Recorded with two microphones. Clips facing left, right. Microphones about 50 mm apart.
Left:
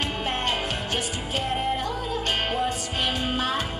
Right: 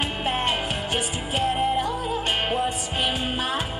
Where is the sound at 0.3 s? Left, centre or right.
Centre.